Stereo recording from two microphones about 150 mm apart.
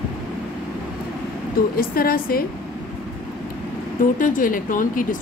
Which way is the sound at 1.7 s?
80° left.